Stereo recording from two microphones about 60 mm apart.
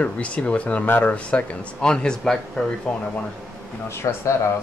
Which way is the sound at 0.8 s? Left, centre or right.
Left.